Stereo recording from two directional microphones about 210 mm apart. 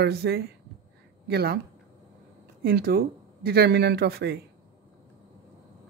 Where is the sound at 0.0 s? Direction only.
50° right (ahead or behind).